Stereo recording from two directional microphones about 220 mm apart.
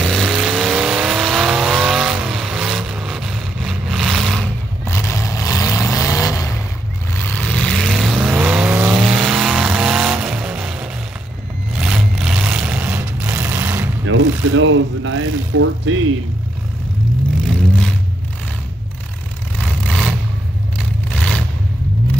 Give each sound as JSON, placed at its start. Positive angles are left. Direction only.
{"t": 0.0, "sound": "vehicle", "side_deg": 0}
{"t": 4.8, "sound": "vehicle", "side_deg": 10}
{"t": 14.0, "sound": "a sound", "side_deg": -65}
{"t": 19.6, "sound": "vehicle", "side_deg": 0}